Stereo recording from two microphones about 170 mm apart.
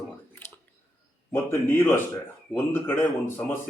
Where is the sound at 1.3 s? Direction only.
15° left (ahead or behind).